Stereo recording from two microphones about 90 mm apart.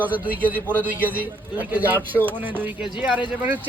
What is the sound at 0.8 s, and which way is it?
A man's voice, 20° right (ahead or behind).